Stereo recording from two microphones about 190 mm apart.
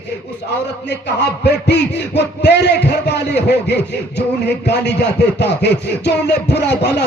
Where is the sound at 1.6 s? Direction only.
65° left (ahead or behind).